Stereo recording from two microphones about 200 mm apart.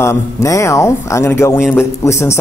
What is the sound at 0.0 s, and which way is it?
A man's voice, 15° left (ahead or behind).